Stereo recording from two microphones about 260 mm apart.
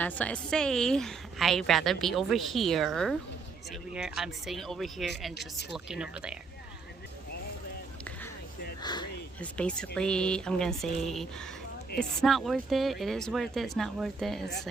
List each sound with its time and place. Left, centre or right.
0.0 s a woman's voice: centre
8.8 s speech: centre
9.4 s a woman's voice: centre